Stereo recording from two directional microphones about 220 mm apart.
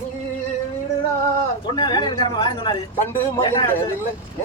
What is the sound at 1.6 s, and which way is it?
Speech, 20° left (ahead or behind).